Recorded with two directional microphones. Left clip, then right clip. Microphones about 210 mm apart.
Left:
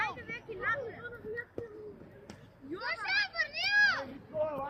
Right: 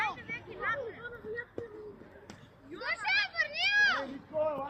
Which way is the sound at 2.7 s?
55° right (ahead or behind).